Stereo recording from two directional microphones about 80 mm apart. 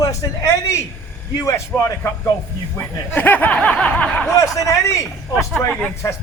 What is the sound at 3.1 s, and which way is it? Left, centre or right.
Snicker, left.